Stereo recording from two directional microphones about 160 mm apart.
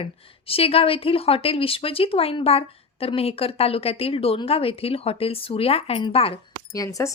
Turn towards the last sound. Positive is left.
turn(degrees=20)  # may be behind; listen again after turning